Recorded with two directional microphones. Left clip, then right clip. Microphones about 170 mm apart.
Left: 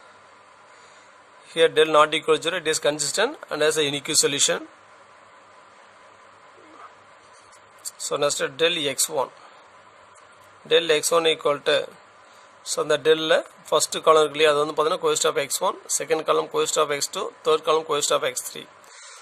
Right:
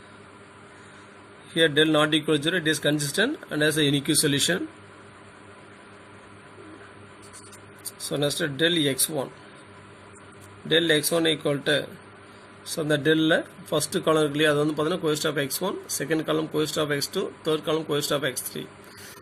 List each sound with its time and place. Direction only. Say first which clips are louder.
1.5 s speech: left 4 dB; 70° left (ahead or behind)
8.1 s speech: left 3 dB; 70° left (ahead or behind)
10.7 s speech: left 2 dB; 70° left (ahead or behind)